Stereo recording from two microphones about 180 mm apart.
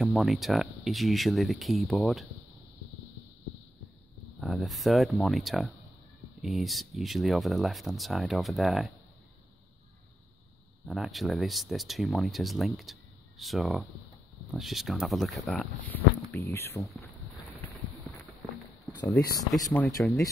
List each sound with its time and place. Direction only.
0.0 s speech: centre (ahead or behind)
4.4 s speech: centre (ahead or behind)
10.9 s speech: centre (ahead or behind); by 16.9 s 15° left (ahead or behind)
18.9 s speech: 20° left (ahead or behind)